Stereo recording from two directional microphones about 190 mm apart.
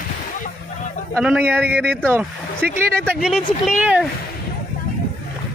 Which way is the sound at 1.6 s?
60° right (ahead or behind).